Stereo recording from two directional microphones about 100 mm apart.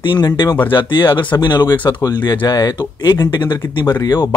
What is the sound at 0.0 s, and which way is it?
Speech, 45° left (ahead or behind).